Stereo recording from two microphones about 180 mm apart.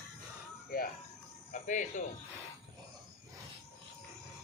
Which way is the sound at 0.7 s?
50° left (ahead or behind).